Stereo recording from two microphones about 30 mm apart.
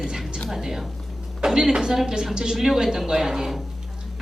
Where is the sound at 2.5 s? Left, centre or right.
Centre.